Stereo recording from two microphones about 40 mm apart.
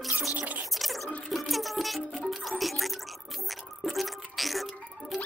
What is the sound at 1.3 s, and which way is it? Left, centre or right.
Music, centre.